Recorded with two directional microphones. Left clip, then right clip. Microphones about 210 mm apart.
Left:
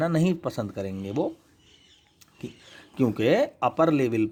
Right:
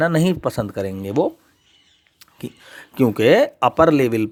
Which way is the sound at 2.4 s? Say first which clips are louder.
Right 7 dB; 25° right (ahead or behind).